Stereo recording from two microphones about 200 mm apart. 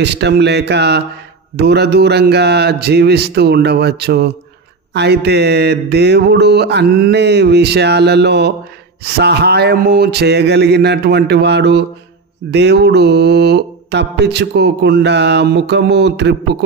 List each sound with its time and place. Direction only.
0.0 s mantra: 55° right (ahead or behind)